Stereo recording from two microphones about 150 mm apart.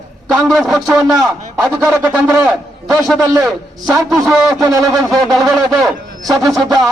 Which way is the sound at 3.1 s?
Centre (ahead or behind).